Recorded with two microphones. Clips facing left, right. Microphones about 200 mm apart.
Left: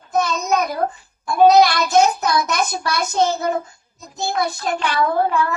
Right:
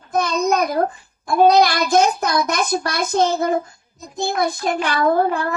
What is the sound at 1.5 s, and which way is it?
A child's voice, 50° right (ahead or behind).